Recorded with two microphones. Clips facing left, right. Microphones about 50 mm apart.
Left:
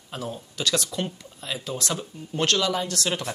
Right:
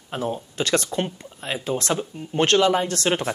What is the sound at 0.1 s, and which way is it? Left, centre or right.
Speech, right.